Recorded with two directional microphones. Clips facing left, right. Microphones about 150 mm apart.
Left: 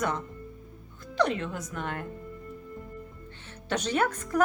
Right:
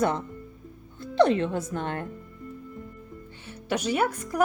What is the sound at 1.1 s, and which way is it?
Speech, 30° right (ahead or behind).